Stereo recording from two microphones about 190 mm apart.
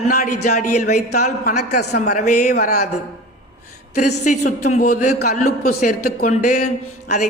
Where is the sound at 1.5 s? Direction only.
60° left (ahead or behind).